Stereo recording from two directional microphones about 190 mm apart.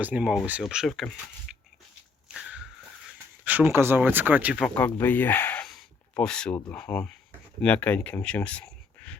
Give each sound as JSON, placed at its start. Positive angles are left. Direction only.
{"t": 0.0, "sound": "speech", "side_deg": -10}
{"t": 2.3, "sound": "a sound", "side_deg": -5}
{"t": 3.1, "sound": "speech", "side_deg": -5}
{"t": 4.8, "sound": "speech", "side_deg": 10}